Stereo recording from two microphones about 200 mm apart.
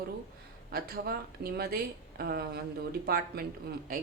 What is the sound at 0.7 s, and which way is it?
Speech, 50° right (ahead or behind).